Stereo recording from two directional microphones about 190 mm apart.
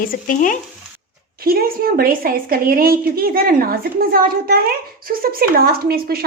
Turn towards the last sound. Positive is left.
turn(degrees=-50)  # may be behind; listen again after turning